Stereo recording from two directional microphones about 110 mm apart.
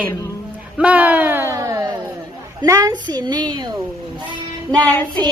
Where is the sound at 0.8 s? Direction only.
15° right (ahead or behind); by 1.9 s 30° right (ahead or behind).